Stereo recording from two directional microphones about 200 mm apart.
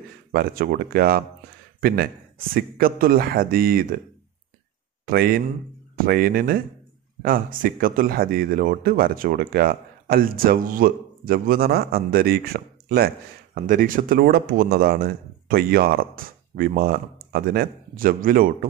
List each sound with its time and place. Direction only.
0.3 s speech: 50° right (ahead or behind)
5.0 s speech: 50° right (ahead or behind)